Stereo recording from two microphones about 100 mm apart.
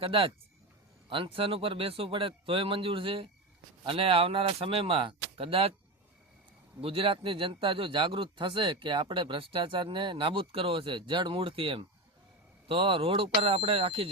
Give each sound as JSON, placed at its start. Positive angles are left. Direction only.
{"t": 0.0, "sound": "speech", "side_deg": -65}
{"t": 6.8, "sound": "speech", "side_deg": -65}